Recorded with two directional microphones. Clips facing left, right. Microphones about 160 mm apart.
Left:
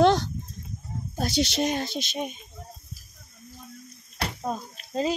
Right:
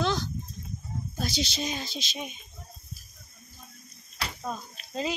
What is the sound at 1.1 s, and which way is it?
Speech, 65° left (ahead or behind).